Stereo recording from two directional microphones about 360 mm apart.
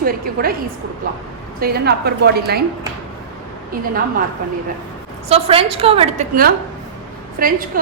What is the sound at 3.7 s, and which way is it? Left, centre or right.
Speech, right.